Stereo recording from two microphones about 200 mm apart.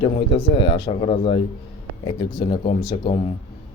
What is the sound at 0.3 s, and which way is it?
Speech, 25° left (ahead or behind).